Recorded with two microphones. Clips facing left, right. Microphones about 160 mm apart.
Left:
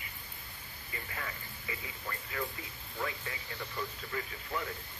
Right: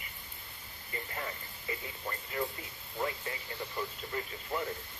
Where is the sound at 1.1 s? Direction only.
30° right (ahead or behind).